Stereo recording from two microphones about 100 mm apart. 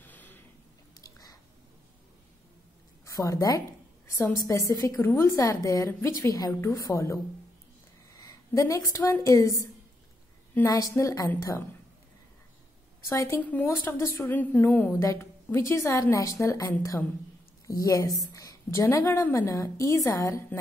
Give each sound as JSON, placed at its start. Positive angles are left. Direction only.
{"t": 0.0, "sound": "a sound", "side_deg": 20}
{"t": 3.1, "sound": "a woman's voice", "side_deg": 35}
{"t": 5.9, "sound": "a woman's voice", "side_deg": 25}
{"t": 13.0, "sound": "a woman's voice", "side_deg": 30}
{"t": 13.4, "sound": "speech", "side_deg": 15}
{"t": 14.2, "sound": "speech", "side_deg": 20}
{"t": 15.0, "sound": "a woman's voice", "side_deg": 30}